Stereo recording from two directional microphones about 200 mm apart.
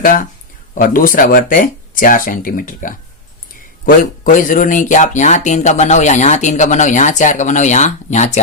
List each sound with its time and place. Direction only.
0.7 s speech: 45° left (ahead or behind)